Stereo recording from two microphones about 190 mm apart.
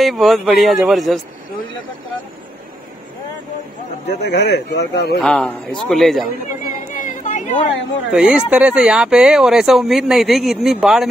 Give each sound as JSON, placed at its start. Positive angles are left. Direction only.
{"t": 0.0, "sound": "speech", "side_deg": 0}
{"t": 4.2, "sound": "a man's voice", "side_deg": 60}
{"t": 5.2, "sound": "speech", "side_deg": 5}
{"t": 6.9, "sound": "a sound", "side_deg": 45}
{"t": 8.1, "sound": "speech", "side_deg": -5}